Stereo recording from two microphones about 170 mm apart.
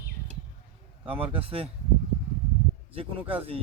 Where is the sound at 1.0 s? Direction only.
35° right (ahead or behind).